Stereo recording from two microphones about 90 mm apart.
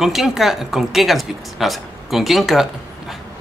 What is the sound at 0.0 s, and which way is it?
Speech, 5° right (ahead or behind).